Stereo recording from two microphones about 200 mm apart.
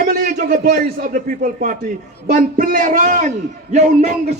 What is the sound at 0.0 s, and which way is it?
A man's voice, 45° right (ahead or behind).